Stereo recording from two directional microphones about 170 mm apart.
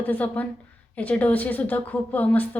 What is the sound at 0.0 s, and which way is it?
A woman's voice, 10° left (ahead or behind).